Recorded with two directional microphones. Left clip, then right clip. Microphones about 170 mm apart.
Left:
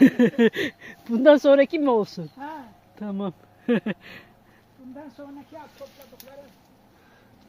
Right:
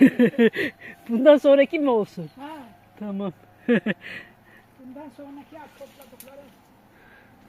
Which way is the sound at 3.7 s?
5° right (ahead or behind).